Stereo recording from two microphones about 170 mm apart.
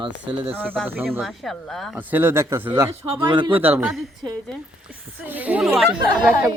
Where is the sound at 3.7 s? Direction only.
10° right (ahead or behind).